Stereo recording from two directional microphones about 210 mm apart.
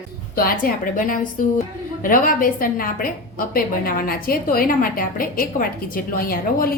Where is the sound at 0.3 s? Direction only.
45° left (ahead or behind).